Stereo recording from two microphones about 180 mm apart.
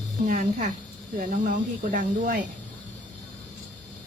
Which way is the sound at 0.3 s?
45° right (ahead or behind).